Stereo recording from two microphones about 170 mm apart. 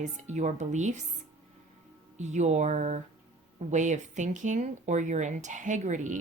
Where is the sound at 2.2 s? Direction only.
45° right (ahead or behind).